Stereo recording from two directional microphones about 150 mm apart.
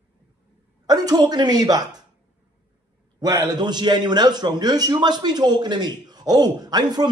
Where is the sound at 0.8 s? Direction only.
25° right (ahead or behind).